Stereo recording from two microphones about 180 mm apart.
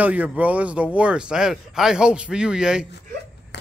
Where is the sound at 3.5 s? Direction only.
70° left (ahead or behind).